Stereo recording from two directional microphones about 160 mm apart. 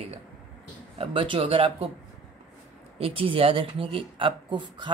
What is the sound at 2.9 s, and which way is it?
Speech, 35° right (ahead or behind).